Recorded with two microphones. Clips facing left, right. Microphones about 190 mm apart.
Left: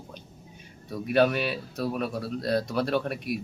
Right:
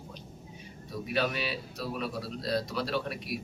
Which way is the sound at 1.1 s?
55° left (ahead or behind).